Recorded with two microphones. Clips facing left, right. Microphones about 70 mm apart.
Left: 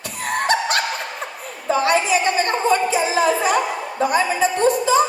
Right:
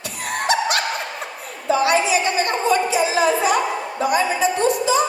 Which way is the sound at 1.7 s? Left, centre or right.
Left.